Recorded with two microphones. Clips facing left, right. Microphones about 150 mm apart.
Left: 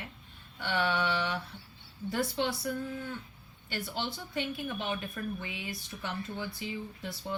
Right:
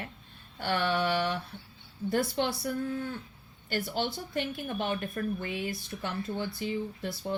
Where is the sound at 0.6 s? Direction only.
45° right (ahead or behind).